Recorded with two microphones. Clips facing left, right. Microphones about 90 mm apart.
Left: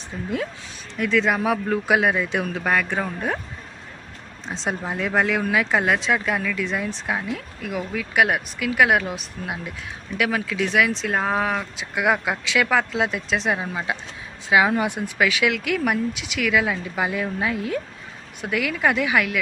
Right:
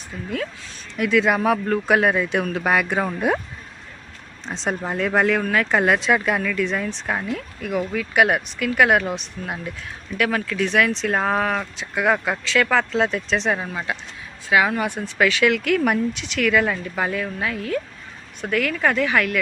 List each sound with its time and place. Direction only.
0.1 s speech: 25° left (ahead or behind)
0.9 s speech: 5° right (ahead or behind)
4.4 s speech: centre (ahead or behind)
15.2 s speech: 5° left (ahead or behind)
18.4 s speech: 5° left (ahead or behind)